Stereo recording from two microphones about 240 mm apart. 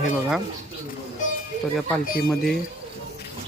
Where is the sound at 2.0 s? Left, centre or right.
Left.